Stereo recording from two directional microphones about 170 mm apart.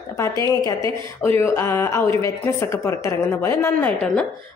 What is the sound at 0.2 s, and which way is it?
A woman's voice, 20° left (ahead or behind).